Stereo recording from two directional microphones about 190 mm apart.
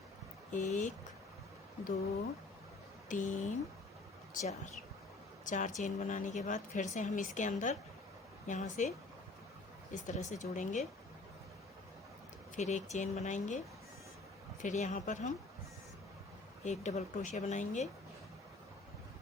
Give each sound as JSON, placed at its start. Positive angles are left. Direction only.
{"t": 0.5, "sound": "speech", "side_deg": 40}
{"t": 3.1, "sound": "speech", "side_deg": 40}
{"t": 9.9, "sound": "speech", "side_deg": 40}
{"t": 12.5, "sound": "speech", "side_deg": 40}
{"t": 14.6, "sound": "speech", "side_deg": 40}
{"t": 16.6, "sound": "speech", "side_deg": 40}